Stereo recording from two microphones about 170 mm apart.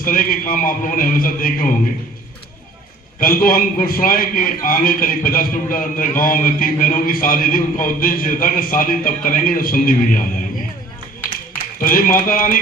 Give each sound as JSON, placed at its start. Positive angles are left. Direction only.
{"t": 0.0, "sound": "a man's voice", "side_deg": 55}
{"t": 3.2, "sound": "a man's voice", "side_deg": 60}
{"t": 11.8, "sound": "a man's voice", "side_deg": 55}